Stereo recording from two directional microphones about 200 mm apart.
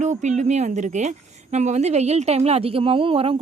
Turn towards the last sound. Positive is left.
turn(degrees=-25)  # may be behind; listen again after turning